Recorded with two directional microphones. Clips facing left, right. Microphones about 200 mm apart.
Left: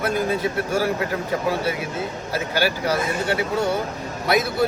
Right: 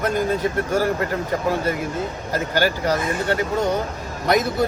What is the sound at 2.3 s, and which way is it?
Speech, 10° left (ahead or behind).